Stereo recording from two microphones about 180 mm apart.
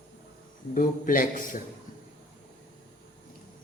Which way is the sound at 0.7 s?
50° left (ahead or behind).